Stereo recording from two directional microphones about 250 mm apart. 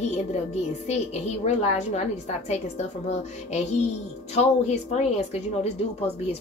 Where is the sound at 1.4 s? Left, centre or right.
Left.